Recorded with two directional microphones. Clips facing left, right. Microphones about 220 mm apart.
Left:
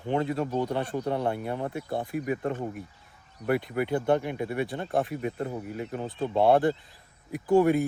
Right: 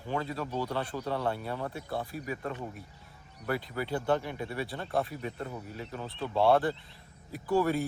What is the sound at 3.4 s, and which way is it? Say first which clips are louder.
Speech: left 7 dB; 20° left (ahead or behind).